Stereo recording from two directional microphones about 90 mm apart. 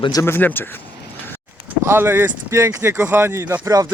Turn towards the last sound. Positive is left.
turn(degrees=-40)  # may be behind; listen again after turning